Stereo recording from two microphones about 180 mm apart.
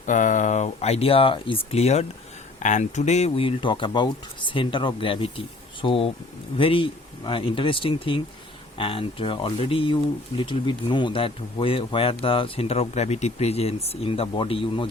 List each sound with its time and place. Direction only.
0.0 s speech: 45° left (ahead or behind)